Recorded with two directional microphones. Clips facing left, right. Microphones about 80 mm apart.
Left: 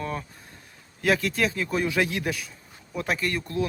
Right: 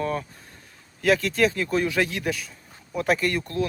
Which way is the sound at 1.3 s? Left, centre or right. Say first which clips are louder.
Right 4 dB; centre.